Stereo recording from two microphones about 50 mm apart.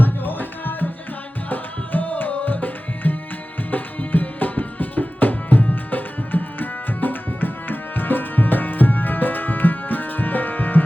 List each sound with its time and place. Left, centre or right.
0.0 s music: left
1.5 s tabla: left
3.7 s music: left